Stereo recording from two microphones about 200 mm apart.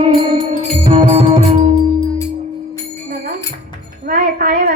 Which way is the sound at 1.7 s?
25° left (ahead or behind).